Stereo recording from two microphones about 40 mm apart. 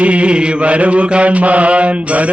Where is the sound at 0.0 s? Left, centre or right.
Right.